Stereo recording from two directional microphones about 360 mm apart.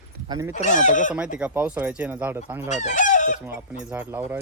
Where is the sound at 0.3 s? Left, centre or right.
Centre.